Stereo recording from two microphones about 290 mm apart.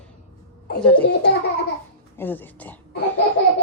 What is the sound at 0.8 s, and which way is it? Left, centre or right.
Speech, centre.